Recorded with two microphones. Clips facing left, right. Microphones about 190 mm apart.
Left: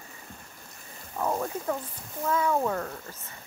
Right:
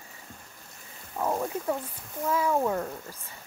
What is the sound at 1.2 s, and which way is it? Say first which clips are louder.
Speech: even; 10° right (ahead or behind).